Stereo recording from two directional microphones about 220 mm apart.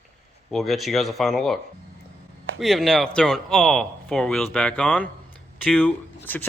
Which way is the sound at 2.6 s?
Centre (ahead or behind).